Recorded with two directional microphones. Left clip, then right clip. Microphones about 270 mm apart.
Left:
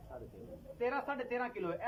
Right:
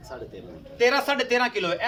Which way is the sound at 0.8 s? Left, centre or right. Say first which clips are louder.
Right 15 dB; right.